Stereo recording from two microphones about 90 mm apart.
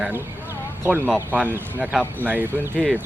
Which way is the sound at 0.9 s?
25° right (ahead or behind).